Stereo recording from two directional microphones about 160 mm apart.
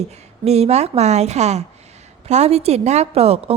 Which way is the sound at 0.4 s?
40° right (ahead or behind).